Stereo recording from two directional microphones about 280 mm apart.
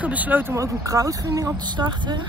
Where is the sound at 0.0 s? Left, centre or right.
Centre.